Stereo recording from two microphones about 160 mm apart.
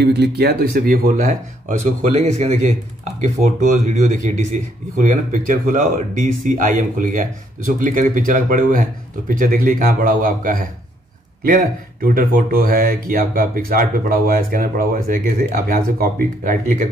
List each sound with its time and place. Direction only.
0.0 s speech: 90° right; by 2.6 s 45° right (ahead or behind)
3.8 s speech: 50° right (ahead or behind)